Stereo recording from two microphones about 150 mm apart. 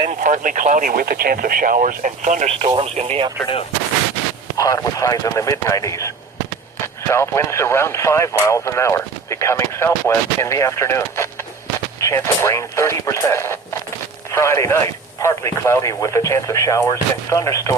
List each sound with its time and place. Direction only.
0.2 s speech: 60° right (ahead or behind); by 3.2 s 45° right (ahead or behind)
4.5 s speech: 20° left (ahead or behind)
7.1 s speech: 20° left (ahead or behind)